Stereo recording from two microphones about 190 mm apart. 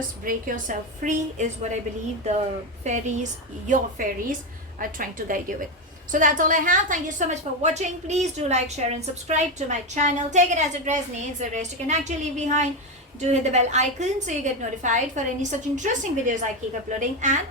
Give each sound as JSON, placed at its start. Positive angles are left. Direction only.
{"t": 0.3, "sound": "a woman's voice", "side_deg": -45}
{"t": 2.8, "sound": "a woman's voice", "side_deg": -40}